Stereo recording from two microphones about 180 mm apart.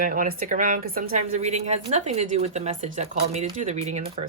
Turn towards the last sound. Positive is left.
turn(degrees=-35)  # may be behind; listen again after turning